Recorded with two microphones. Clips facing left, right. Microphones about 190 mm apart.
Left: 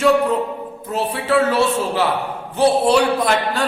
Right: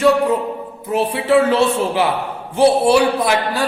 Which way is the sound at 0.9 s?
15° right (ahead or behind).